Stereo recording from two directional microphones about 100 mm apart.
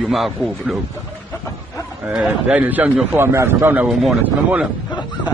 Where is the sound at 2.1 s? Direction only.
10° right (ahead or behind).